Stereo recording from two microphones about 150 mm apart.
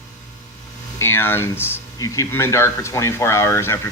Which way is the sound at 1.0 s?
15° left (ahead or behind).